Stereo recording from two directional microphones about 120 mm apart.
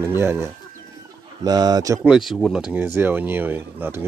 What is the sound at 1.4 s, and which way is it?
Speech, 35° right (ahead or behind).